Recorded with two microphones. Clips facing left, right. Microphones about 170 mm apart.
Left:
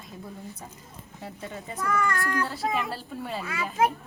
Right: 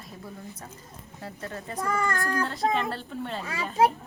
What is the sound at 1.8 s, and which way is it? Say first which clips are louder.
Speech: left 1 dB; 30° right (ahead or behind).